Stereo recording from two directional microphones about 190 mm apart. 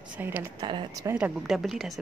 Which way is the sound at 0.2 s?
10° right (ahead or behind).